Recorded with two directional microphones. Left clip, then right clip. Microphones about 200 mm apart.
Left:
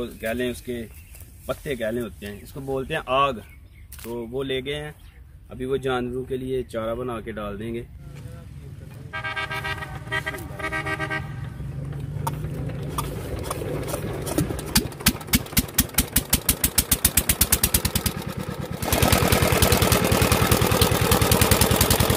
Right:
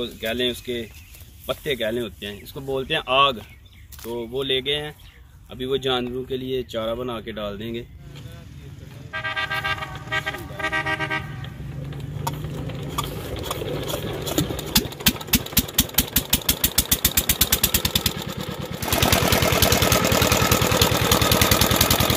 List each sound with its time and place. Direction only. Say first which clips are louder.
0.0 s speech: right 3 dB; centre (ahead or behind)
5.5 s speech: right 2 dB; 5° left (ahead or behind)
9.1 s vehicle: right 3 dB; 45° left (ahead or behind)
12.3 s vehicle: right 1 dB; 10° left (ahead or behind)
18.9 s a sound: right 1 dB; 50° left (ahead or behind)